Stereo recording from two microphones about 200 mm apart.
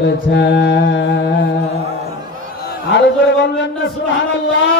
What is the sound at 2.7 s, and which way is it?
Mantra, 65° left (ahead or behind).